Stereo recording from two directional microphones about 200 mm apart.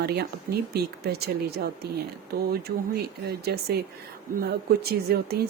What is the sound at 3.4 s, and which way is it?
Speech, 55° right (ahead or behind).